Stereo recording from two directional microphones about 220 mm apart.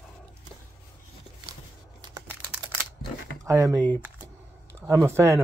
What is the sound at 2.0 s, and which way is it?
Crumpling, 15° right (ahead or behind).